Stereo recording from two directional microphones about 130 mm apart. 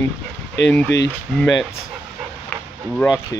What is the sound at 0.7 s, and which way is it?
Speech, 10° left (ahead or behind).